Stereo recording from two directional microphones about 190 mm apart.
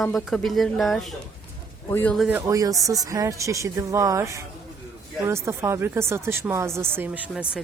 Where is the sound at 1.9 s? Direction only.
10° left (ahead or behind).